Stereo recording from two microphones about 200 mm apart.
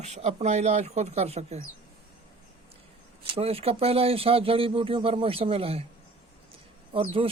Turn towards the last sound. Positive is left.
turn(degrees=-30)  # may be behind; listen again after turning